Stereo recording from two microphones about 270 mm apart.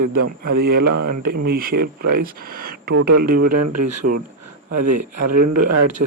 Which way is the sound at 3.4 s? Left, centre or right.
Right.